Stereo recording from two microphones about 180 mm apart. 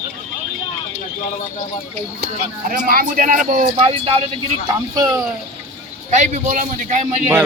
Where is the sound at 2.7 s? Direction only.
50° right (ahead or behind).